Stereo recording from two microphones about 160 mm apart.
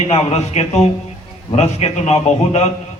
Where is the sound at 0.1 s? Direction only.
40° left (ahead or behind).